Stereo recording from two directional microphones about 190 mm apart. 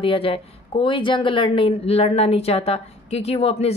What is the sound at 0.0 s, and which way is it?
A woman's voice, 30° left (ahead or behind).